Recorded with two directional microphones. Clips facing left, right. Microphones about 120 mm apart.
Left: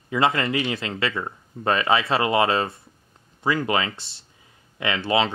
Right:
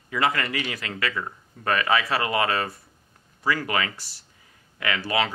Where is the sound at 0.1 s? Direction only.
25° left (ahead or behind).